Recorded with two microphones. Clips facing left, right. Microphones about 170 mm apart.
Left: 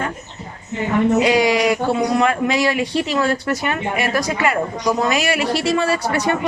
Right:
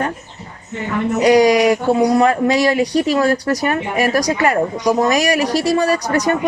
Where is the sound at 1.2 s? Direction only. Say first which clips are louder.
Right 5 dB; 40° right (ahead or behind).